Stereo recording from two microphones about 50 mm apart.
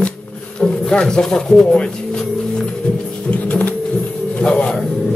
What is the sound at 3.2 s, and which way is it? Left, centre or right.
Pigeon, left.